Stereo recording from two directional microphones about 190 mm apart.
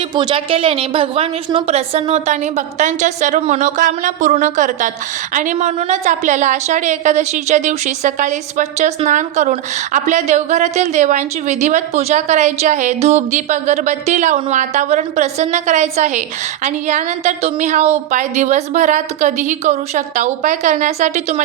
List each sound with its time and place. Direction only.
0.1 s a woman's voice: 25° right (ahead or behind); by 21.4 s 40° right (ahead or behind)